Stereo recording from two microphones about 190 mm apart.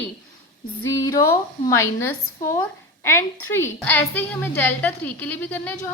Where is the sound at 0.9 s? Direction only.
15° left (ahead or behind).